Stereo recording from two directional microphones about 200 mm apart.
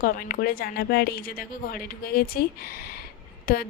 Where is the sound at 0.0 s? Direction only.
45° left (ahead or behind).